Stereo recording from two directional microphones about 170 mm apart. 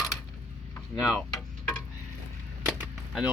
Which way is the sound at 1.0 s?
Centre (ahead or behind).